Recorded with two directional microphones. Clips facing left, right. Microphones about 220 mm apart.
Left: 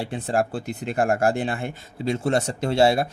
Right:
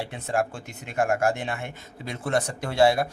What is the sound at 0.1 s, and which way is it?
Speech, 35° left (ahead or behind).